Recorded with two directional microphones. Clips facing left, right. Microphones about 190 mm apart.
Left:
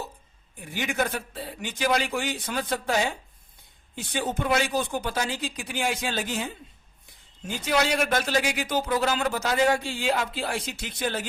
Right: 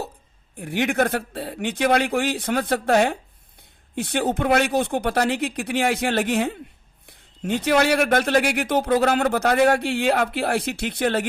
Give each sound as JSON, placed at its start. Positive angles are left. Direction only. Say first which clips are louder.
{"t": 0.5, "sound": "speech", "louder": "right 7 dB", "side_deg": -65}